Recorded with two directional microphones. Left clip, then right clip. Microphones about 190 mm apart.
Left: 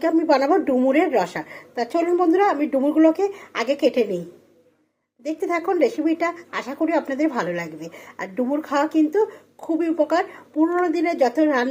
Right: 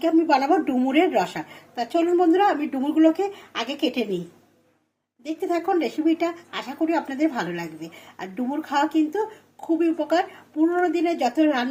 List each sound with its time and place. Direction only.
0.3 s a woman's voice: 15° left (ahead or behind)
5.2 s a woman's voice: 20° left (ahead or behind)
11.0 s a woman's voice: centre (ahead or behind)
11.3 s a woman's voice: 20° left (ahead or behind)